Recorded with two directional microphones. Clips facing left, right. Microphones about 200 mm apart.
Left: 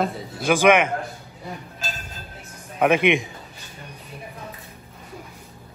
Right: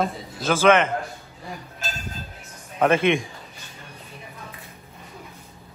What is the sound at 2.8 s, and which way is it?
Speech, 15° left (ahead or behind).